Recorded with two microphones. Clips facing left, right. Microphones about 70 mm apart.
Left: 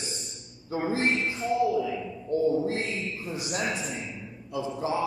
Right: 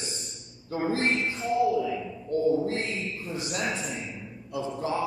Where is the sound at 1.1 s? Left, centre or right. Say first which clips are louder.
Even; centre.